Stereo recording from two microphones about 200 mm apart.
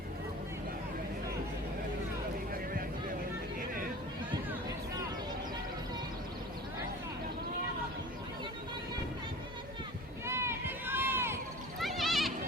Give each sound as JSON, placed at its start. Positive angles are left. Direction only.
{"t": 10.2, "sound": "run", "side_deg": -15}
{"t": 11.8, "sound": "goat", "side_deg": 0}